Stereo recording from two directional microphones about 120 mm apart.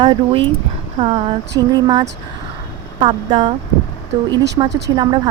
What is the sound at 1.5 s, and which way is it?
A woman's voice, 35° right (ahead or behind).